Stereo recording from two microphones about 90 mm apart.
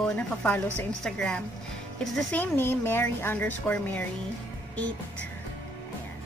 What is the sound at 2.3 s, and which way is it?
A woman's voice, 25° left (ahead or behind).